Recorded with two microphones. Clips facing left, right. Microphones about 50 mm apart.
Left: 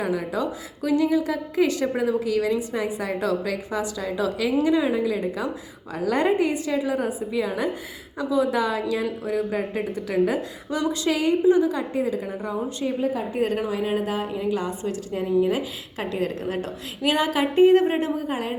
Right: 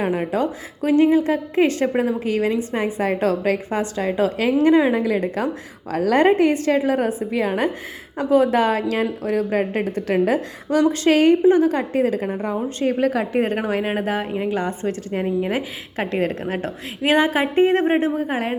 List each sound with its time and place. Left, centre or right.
0.0 s a woman's voice: right
12.8 s a woman's voice: right
13.4 s a woman's voice: right
13.7 s a woman's voice: right